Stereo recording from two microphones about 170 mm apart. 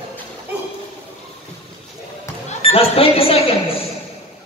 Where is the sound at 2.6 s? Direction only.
35° left (ahead or behind).